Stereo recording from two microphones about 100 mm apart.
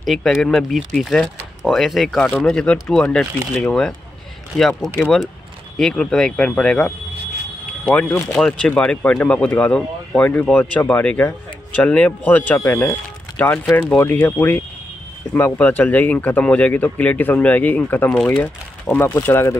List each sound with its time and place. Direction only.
0.0 s speech: centre (ahead or behind); by 19.6 s 25° left (ahead or behind)